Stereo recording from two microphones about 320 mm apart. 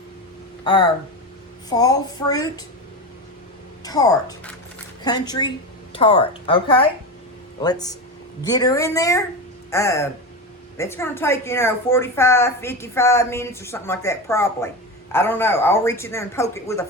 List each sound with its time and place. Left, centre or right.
0.6 s a woman's voice: centre
3.8 s a woman's voice: centre